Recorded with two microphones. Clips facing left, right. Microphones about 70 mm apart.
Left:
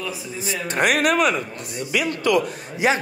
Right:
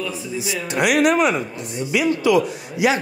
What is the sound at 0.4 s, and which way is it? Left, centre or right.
A man's voice, left.